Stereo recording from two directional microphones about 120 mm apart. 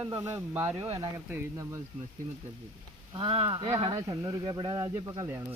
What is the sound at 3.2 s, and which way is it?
Speech, 45° right (ahead or behind).